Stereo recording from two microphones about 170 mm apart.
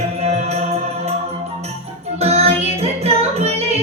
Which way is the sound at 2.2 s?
35° right (ahead or behind).